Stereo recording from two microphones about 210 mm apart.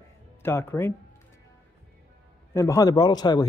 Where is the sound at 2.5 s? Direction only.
15° left (ahead or behind).